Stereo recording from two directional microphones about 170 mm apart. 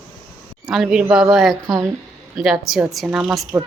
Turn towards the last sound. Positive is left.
turn(degrees=-5)  # may be behind; listen again after turning